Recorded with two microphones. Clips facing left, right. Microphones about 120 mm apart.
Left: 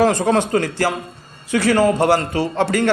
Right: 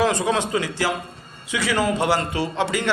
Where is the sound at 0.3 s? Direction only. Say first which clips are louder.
Left 5 dB; 50° left (ahead or behind).